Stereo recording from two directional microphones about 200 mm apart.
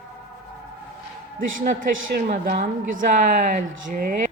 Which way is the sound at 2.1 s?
45° right (ahead or behind).